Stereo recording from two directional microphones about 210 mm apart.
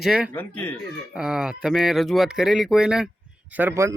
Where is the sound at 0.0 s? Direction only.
Centre (ahead or behind).